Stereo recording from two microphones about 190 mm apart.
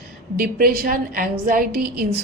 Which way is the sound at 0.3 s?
50° right (ahead or behind).